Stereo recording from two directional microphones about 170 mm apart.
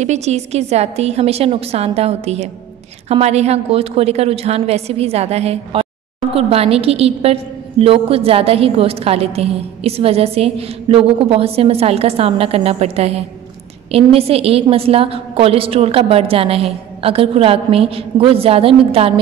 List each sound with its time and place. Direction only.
0.0 s a woman's voice: 40° right (ahead or behind)